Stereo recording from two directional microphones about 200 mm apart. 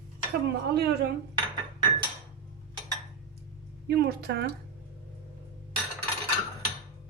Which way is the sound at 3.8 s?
55° right (ahead or behind).